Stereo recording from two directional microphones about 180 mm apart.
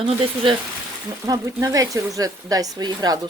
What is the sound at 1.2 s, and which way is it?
Speech, 20° right (ahead or behind).